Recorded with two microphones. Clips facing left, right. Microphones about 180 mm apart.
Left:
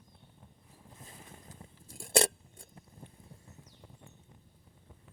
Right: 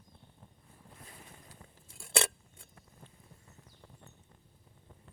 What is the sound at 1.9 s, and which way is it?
Scissors, 40° left (ahead or behind).